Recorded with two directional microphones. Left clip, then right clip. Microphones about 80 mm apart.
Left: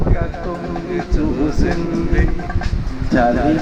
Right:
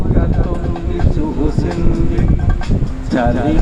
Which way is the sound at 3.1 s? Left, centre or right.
Left.